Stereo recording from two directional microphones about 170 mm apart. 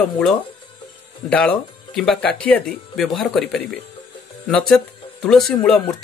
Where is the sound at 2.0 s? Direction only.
5° left (ahead or behind).